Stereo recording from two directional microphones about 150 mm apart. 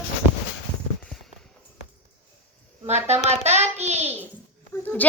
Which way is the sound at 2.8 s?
45° right (ahead or behind).